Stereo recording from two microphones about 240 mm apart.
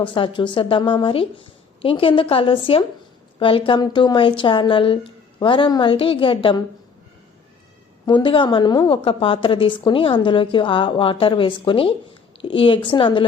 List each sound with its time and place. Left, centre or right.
0.0 s a woman's voice: left
8.0 s a woman's voice: centre